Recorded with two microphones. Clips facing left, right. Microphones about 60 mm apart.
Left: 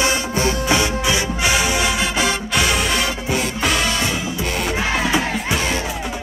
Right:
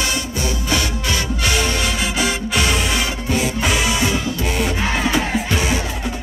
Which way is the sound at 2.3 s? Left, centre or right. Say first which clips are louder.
Even; centre.